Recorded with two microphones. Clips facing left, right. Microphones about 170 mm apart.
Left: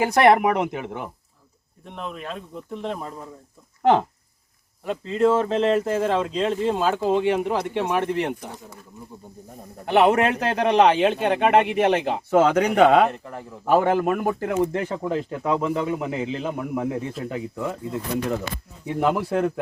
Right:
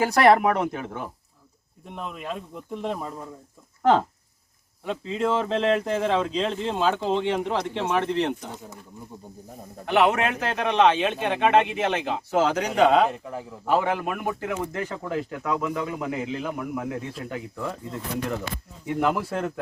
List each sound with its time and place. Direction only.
0.0 s speech: 20° left (ahead or behind)
2.2 s speech: 10° right (ahead or behind)
4.9 s speech: centre (ahead or behind)
9.8 s a man's voice: 30° left (ahead or behind)
12.3 s speech: 55° left (ahead or behind)
13.1 s speech: 5° right (ahead or behind)
13.7 s speech: 45° left (ahead or behind)
14.6 s speech: 25° left (ahead or behind)
18.9 s speech: 15° left (ahead or behind)